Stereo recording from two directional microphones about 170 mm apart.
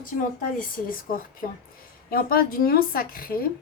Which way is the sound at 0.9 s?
55° left (ahead or behind).